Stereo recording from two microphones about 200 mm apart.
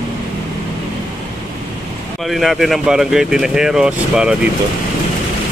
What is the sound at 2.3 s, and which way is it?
Speech, centre (ahead or behind).